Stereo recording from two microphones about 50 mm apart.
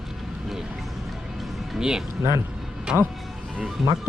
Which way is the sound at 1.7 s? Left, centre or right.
Centre.